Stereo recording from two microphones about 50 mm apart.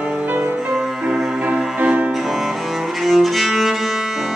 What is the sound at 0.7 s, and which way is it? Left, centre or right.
Music, centre.